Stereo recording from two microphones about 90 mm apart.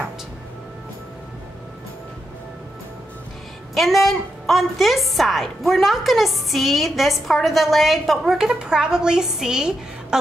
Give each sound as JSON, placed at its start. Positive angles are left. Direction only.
{"t": 3.7, "sound": "a woman's voice", "side_deg": 0}